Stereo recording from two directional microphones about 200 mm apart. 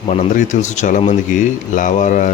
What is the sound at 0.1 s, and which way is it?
Speech, 35° left (ahead or behind).